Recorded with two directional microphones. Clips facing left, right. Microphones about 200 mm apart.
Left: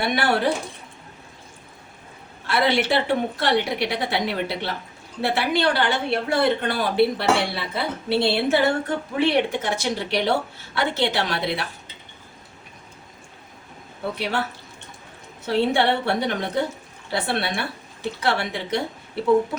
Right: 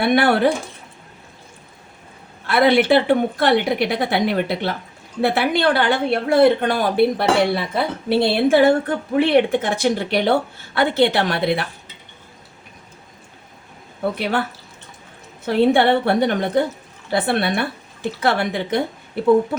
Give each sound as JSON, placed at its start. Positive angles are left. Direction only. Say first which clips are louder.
{"t": 0.0, "sound": "a woman's voice", "louder": "right 6 dB", "side_deg": -55}
{"t": 2.5, "sound": "a woman's voice", "louder": "right 6 dB", "side_deg": -55}
{"t": 14.0, "sound": "a woman's voice", "louder": "right 5 dB", "side_deg": -55}
{"t": 15.4, "sound": "a woman's voice", "louder": "right 5 dB", "side_deg": -55}